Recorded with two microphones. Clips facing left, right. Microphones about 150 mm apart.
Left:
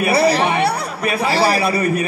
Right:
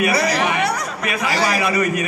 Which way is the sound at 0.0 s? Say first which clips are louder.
Left 3 dB; 30° left (ahead or behind).